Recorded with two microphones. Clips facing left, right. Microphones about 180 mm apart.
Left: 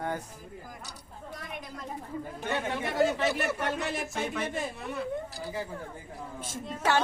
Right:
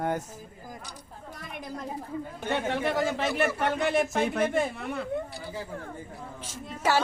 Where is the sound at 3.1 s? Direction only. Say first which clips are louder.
Right 2 dB; 65° right (ahead or behind).